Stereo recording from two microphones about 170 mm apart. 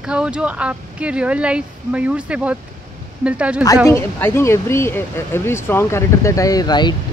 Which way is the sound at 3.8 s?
15° left (ahead or behind).